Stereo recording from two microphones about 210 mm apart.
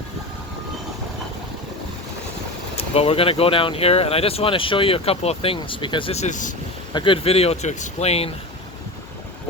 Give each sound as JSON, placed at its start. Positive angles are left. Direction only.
{"t": 2.7, "sound": "speech", "side_deg": 30}
{"t": 6.9, "sound": "speech", "side_deg": 25}